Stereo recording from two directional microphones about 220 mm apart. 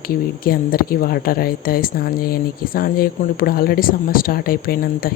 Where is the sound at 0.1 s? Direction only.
40° left (ahead or behind).